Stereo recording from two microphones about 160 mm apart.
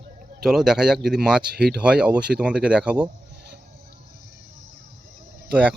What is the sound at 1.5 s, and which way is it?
Speech, 80° right.